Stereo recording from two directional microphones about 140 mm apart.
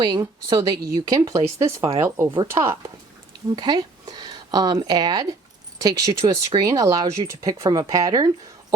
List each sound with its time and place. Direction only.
0.0 s speech: 30° right (ahead or behind)